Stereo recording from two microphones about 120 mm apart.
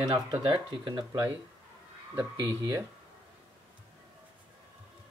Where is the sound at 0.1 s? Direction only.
50° right (ahead or behind).